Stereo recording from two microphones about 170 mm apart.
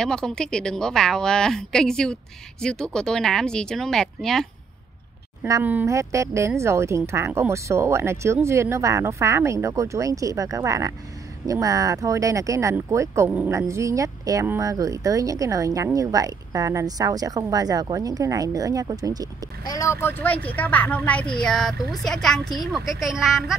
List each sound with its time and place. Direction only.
0.0 s a woman's voice: 5° left (ahead or behind)
5.4 s speech: 10° right (ahead or behind)
19.6 s a woman's voice: 20° left (ahead or behind); by 23.5 s centre (ahead or behind)